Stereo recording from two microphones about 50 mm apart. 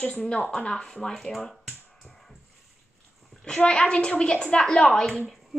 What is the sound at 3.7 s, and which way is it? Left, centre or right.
A child's voice, centre.